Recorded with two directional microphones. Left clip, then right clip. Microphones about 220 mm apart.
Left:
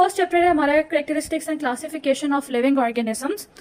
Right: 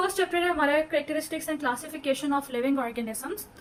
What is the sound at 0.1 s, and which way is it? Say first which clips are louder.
A woman's voice: left 8 dB; 35° left (ahead or behind).